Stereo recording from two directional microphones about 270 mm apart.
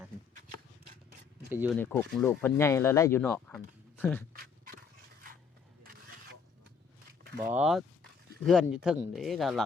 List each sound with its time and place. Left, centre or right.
1.5 s speech: centre
1.8 s speech: centre
4.4 s dog: right
7.4 s speech: centre